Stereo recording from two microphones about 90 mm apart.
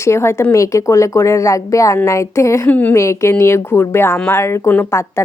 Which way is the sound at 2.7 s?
15° left (ahead or behind).